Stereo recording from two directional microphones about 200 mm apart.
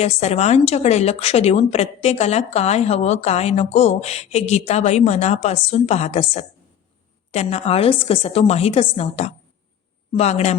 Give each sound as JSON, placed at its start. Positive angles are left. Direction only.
{"t": 0.0, "sound": "a woman's voice", "side_deg": 35}